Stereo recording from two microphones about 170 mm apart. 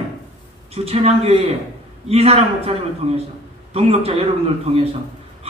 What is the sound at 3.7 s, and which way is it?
Speech, 35° right (ahead or behind).